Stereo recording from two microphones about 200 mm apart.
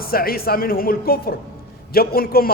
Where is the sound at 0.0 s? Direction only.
50° left (ahead or behind).